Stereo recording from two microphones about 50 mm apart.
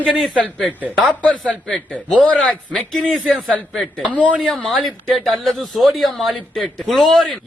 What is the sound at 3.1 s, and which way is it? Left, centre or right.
Speech, centre.